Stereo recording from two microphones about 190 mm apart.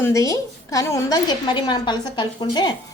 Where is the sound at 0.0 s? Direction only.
15° left (ahead or behind).